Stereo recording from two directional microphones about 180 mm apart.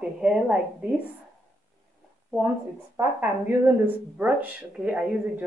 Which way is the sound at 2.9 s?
10° right (ahead or behind).